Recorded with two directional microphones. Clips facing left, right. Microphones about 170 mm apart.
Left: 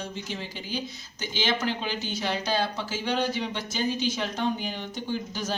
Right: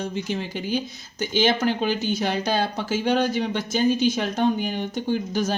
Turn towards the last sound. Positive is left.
turn(degrees=-55)  # may be behind; listen again after turning